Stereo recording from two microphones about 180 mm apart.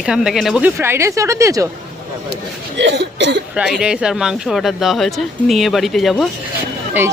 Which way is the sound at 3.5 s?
5° right (ahead or behind).